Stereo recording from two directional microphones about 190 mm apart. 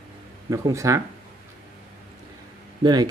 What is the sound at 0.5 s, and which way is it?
Speech, 15° right (ahead or behind).